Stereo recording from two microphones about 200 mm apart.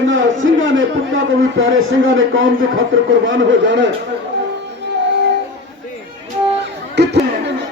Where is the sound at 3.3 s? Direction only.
65° right (ahead or behind).